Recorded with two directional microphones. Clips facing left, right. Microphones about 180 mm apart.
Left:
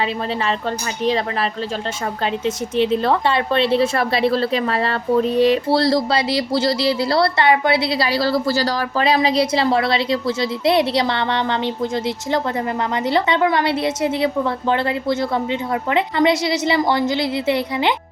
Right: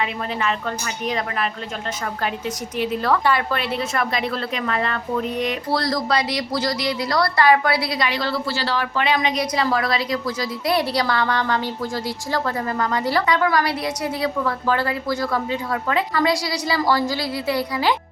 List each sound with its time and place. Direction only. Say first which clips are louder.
1.0 s a woman's voice: left 5 dB; 30° left (ahead or behind)